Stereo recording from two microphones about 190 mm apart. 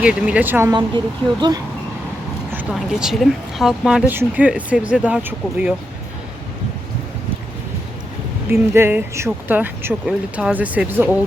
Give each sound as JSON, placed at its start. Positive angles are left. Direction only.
{"t": 0.0, "sound": "speech", "side_deg": -5}
{"t": 0.7, "sound": "speech", "side_deg": -25}
{"t": 2.5, "sound": "speech", "side_deg": -5}
{"t": 8.7, "sound": "speech", "side_deg": -10}